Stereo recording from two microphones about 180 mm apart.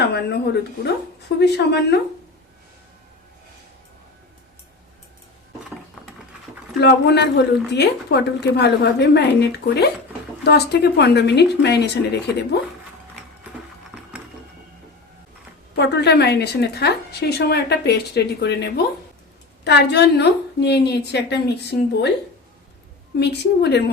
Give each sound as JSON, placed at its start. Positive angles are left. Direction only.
{"t": 0.0, "sound": "a woman's voice", "side_deg": 65}
{"t": 6.7, "sound": "a woman's voice", "side_deg": 65}
{"t": 15.7, "sound": "a woman's voice", "side_deg": 65}
{"t": 23.2, "sound": "a woman's voice", "side_deg": 65}